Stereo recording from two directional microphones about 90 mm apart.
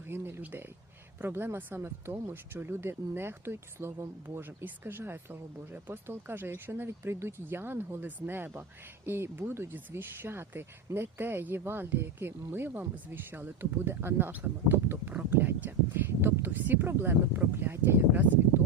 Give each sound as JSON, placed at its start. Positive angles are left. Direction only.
{"t": 0.0, "sound": "speech", "side_deg": -25}